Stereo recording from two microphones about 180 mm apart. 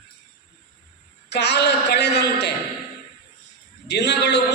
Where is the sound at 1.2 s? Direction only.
70° left (ahead or behind).